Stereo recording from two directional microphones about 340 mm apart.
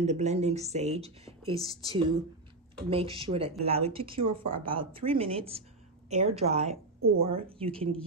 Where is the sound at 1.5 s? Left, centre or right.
Centre.